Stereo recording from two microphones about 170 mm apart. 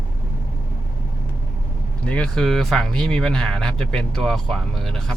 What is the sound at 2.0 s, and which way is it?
Speech, 5° left (ahead or behind).